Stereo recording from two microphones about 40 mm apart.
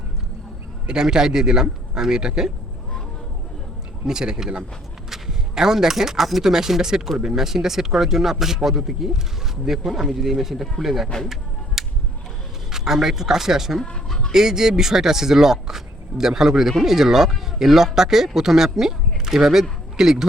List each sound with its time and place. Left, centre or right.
0.9 s speech: centre
4.0 s speech: centre
5.0 s speech: centre
11.3 s music: centre
12.7 s speech: centre